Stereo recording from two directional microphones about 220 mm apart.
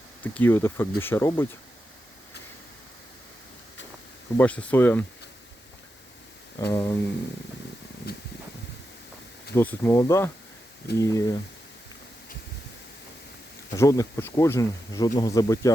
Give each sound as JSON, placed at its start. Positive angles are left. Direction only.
{"t": 0.2, "sound": "speech", "side_deg": 10}
{"t": 4.4, "sound": "speech", "side_deg": 5}
{"t": 6.7, "sound": "speech", "side_deg": 10}
{"t": 8.1, "sound": "a sound", "side_deg": 45}
{"t": 9.6, "sound": "speech", "side_deg": 10}
{"t": 13.7, "sound": "speech", "side_deg": 15}